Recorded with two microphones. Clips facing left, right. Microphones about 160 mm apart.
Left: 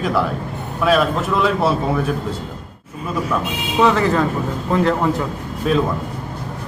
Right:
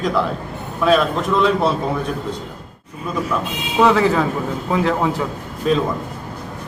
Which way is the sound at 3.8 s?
Centre (ahead or behind).